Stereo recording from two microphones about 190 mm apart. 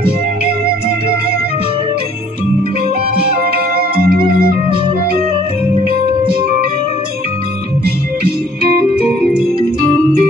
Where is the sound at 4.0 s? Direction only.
50° right (ahead or behind).